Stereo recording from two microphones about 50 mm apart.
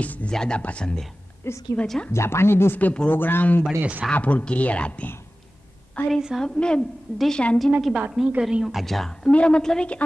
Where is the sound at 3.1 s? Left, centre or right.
Left.